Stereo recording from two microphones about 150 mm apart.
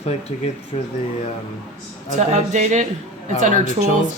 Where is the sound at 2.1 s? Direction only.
50° right (ahead or behind).